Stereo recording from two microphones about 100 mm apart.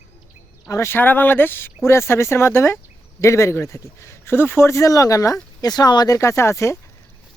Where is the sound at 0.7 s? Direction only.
25° left (ahead or behind); by 6.1 s 45° left (ahead or behind).